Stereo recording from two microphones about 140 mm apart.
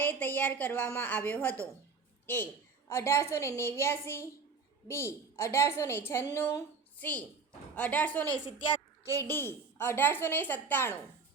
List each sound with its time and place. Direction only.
0.0 s a woman's voice: 10° left (ahead or behind)
9.0 s a woman's voice: 20° right (ahead or behind)
9.3 s a woman's voice: 15° left (ahead or behind)